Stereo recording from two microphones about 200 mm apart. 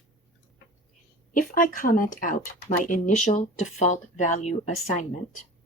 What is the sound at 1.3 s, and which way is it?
Speech, 45° left (ahead or behind).